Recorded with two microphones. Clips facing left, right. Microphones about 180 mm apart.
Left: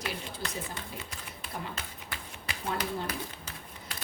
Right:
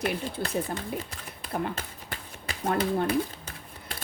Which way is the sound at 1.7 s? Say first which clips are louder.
Right 3 dB; 40° right (ahead or behind).